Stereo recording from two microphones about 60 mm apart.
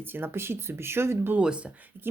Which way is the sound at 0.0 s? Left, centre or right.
Right.